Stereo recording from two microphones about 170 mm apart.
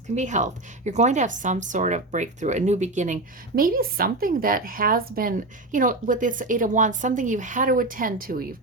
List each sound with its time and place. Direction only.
0.2 s a woman's voice: 45° right (ahead or behind)